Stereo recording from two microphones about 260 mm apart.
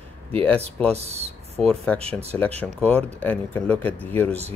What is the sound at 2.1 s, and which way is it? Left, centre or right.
Speech, centre.